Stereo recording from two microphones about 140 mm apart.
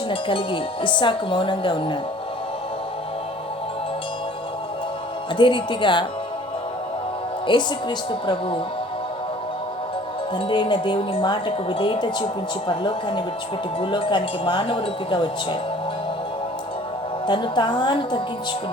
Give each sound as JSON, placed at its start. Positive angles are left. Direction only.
{"t": 0.1, "sound": "speech", "side_deg": 35}
{"t": 5.4, "sound": "speech", "side_deg": 35}
{"t": 7.4, "sound": "speech", "side_deg": 35}
{"t": 10.3, "sound": "speech", "side_deg": 35}
{"t": 17.2, "sound": "speech", "side_deg": 35}